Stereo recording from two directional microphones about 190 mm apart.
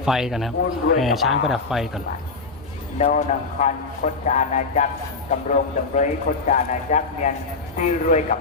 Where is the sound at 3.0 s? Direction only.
40° left (ahead or behind).